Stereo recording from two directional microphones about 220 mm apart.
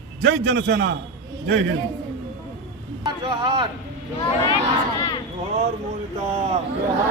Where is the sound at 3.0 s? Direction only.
20° right (ahead or behind).